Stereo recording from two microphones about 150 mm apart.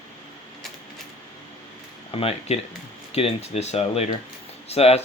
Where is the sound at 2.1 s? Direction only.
40° left (ahead or behind).